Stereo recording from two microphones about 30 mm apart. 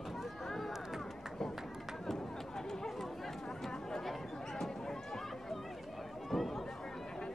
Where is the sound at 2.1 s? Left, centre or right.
Centre.